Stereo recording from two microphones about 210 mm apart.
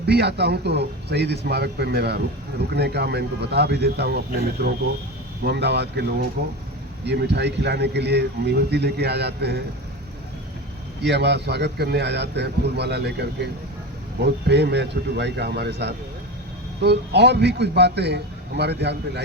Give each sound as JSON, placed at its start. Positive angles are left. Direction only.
{"t": 0.0, "sound": "a man's voice", "side_deg": -50}
{"t": 11.0, "sound": "a man's voice", "side_deg": -55}